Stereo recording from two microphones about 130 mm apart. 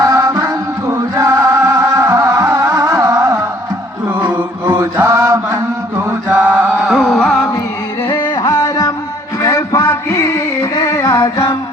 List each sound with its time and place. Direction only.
0.0 s music: 25° right (ahead or behind)
4.3 s chant: 15° right (ahead or behind)
6.3 s chant: 10° right (ahead or behind); by 7.5 s 5° left (ahead or behind)
8.0 s music: 35° left (ahead or behind)
9.4 s a sound: 25° left (ahead or behind)